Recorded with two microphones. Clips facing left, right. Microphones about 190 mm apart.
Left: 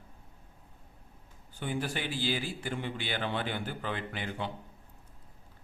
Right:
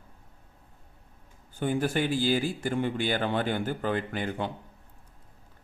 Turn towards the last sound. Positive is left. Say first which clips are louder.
# right 5 dB
turn(degrees=-45)  # may be behind; listen again after turning